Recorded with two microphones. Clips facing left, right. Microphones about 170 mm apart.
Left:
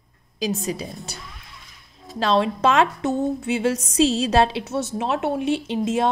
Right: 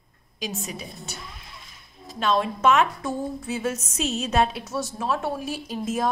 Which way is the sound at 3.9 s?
90° left.